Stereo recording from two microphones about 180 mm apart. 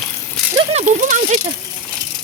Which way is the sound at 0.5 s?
35° right (ahead or behind).